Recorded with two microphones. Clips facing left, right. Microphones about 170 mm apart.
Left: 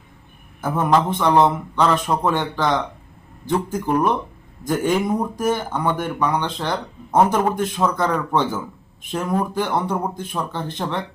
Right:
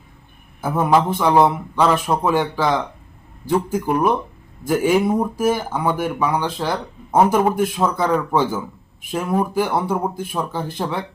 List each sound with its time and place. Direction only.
0.6 s speech: 10° right (ahead or behind)